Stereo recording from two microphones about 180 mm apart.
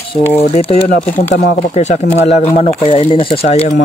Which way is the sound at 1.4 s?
60° left (ahead or behind).